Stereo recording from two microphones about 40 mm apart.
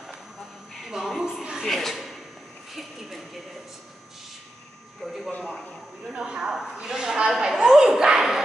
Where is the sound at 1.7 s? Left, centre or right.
Centre.